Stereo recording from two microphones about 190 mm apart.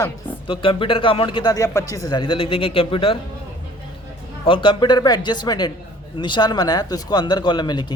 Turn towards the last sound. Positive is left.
turn(degrees=25)  # may be behind; listen again after turning